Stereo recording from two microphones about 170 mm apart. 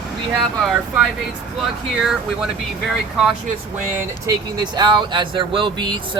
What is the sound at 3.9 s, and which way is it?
Speech, 25° right (ahead or behind).